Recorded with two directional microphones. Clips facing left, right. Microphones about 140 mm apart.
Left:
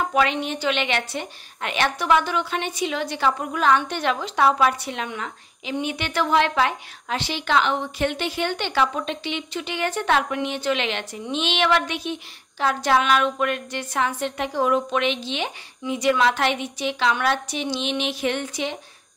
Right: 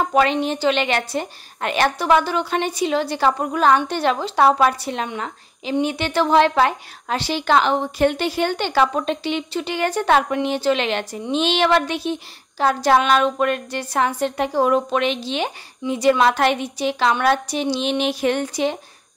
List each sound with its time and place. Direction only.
0.1 s a woman's voice: 35° right (ahead or behind)